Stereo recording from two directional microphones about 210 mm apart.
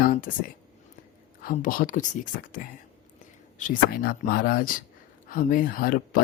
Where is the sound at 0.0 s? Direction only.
40° left (ahead or behind).